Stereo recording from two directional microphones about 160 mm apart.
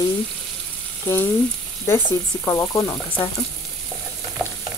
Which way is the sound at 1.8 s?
15° left (ahead or behind).